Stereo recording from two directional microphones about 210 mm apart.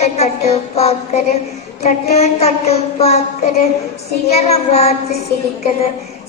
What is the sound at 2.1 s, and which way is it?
A woman's voice, 30° left (ahead or behind).